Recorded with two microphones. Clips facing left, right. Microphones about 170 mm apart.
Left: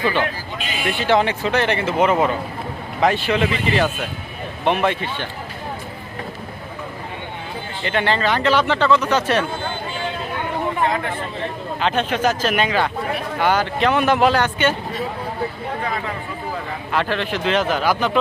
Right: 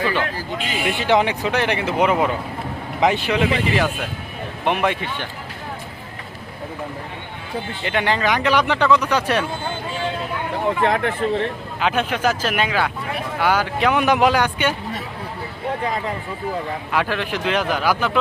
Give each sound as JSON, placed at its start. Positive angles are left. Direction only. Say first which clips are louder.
{"t": 0.9, "sound": "speech", "louder": "even", "side_deg": -15}
{"t": 7.9, "sound": "speech", "louder": "left 1 dB", "side_deg": -10}
{"t": 10.8, "sound": "speech", "louder": "right 4 dB", "side_deg": -65}
{"t": 11.8, "sound": "speech", "louder": "left 1 dB", "side_deg": -10}
{"t": 16.9, "sound": "speech", "louder": "left 1 dB", "side_deg": -10}